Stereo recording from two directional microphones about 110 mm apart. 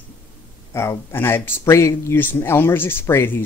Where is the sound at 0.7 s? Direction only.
20° left (ahead or behind).